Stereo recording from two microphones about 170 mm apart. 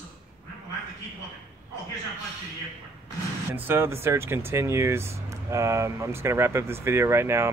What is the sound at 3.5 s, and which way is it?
Speech, 15° right (ahead or behind).